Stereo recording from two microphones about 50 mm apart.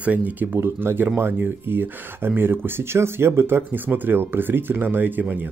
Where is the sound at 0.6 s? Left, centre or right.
Right.